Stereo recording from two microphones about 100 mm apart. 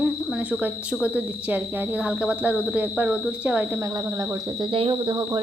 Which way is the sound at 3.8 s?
35° right (ahead or behind).